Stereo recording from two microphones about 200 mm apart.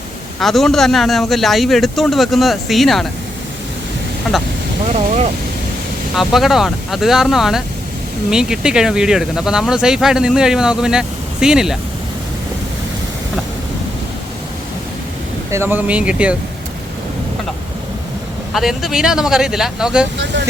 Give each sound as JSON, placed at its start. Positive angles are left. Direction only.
{"t": 0.3, "sound": "speech", "side_deg": 0}
{"t": 4.8, "sound": "speech", "side_deg": -35}
{"t": 6.1, "sound": "speech", "side_deg": 0}
{"t": 15.4, "sound": "speech", "side_deg": -15}
{"t": 18.5, "sound": "speech", "side_deg": 0}
{"t": 20.1, "sound": "speech", "side_deg": -60}